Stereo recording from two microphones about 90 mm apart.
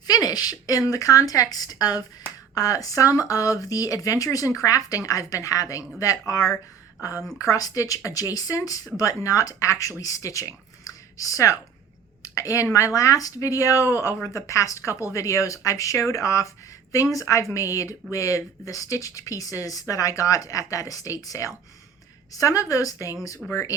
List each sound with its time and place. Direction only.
0.1 s a woman's voice: 45° left (ahead or behind)
12.2 s a sound: 35° left (ahead or behind)
12.7 s speech: 40° left (ahead or behind)
23.4 s speech: centre (ahead or behind)